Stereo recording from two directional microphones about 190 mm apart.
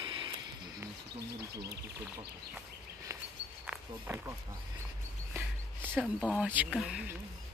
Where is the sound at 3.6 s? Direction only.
5° right (ahead or behind).